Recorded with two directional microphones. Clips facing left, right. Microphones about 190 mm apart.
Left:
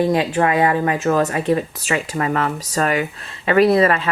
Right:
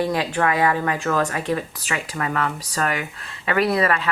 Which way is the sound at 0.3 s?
20° left (ahead or behind).